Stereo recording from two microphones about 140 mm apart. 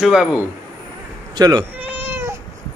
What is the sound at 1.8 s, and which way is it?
Cat, 10° right (ahead or behind).